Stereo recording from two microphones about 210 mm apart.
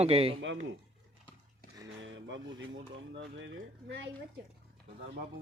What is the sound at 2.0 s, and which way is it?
Speech, 60° right (ahead or behind).